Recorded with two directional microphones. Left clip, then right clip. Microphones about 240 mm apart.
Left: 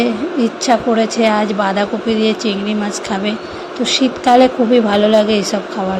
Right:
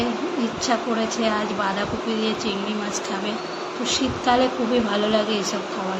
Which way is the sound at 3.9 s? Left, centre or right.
Left.